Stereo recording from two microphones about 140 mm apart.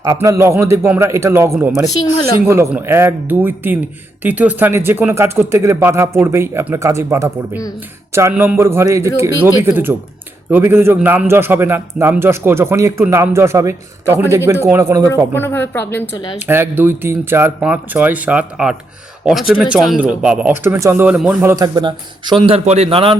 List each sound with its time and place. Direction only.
0.0 s a man's voice: 25° right (ahead or behind)
15.3 s a woman's voice: 15° left (ahead or behind)
16.5 s a man's voice: 15° right (ahead or behind)
21.5 s speech: 30° right (ahead or behind)